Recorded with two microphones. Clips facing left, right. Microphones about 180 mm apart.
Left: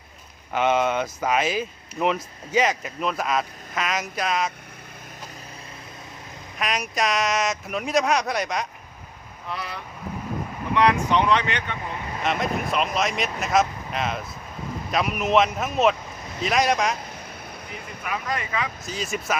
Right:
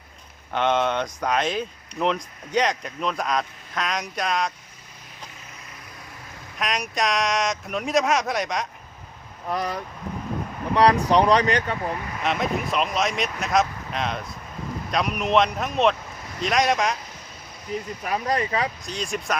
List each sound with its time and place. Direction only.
0.5 s speech: 5° left (ahead or behind)
6.6 s speech: centre (ahead or behind)
9.5 s speech: 45° right (ahead or behind)
12.2 s speech: centre (ahead or behind)
18.0 s speech: 35° right (ahead or behind)
18.9 s speech: 5° left (ahead or behind)